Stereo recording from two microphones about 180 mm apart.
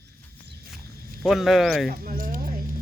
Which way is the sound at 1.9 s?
50° right (ahead or behind).